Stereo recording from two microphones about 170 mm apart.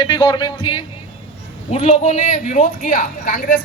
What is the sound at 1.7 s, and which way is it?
A man's voice, 40° left (ahead or behind).